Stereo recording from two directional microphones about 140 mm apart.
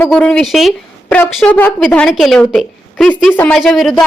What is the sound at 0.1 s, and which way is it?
A woman's voice, 5° left (ahead or behind).